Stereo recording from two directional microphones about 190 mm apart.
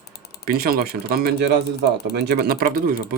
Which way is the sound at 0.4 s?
50° right (ahead or behind).